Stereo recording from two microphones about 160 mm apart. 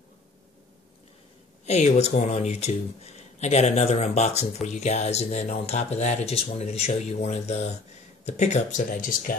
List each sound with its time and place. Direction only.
1.7 s speech: 40° left (ahead or behind)
8.8 s speech: 60° left (ahead or behind)